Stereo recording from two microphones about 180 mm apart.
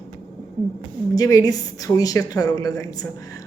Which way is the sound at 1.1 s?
20° left (ahead or behind).